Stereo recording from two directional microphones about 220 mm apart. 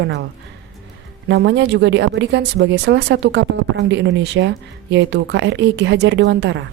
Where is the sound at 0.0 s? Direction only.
50° right (ahead or behind).